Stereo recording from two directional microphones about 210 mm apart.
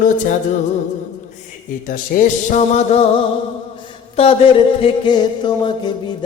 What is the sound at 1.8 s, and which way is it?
Music, 40° left (ahead or behind).